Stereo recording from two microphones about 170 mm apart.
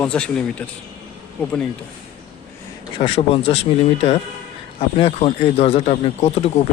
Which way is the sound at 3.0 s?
35° left (ahead or behind).